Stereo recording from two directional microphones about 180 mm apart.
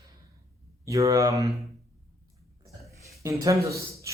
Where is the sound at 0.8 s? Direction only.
15° right (ahead or behind).